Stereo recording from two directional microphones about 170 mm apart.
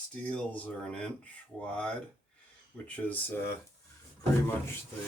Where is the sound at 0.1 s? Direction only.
5° left (ahead or behind).